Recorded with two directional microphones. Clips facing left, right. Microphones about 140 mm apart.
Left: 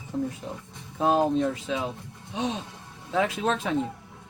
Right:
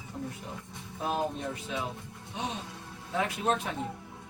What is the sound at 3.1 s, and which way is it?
Speech, 90° left.